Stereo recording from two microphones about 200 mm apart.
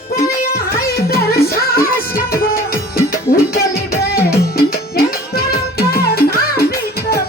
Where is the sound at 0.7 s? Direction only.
50° left (ahead or behind).